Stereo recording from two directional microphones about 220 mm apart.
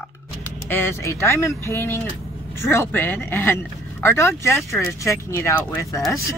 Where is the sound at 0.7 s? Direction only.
10° left (ahead or behind).